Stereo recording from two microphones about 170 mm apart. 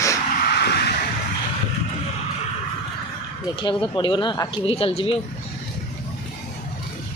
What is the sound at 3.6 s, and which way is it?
Speech, 30° left (ahead or behind).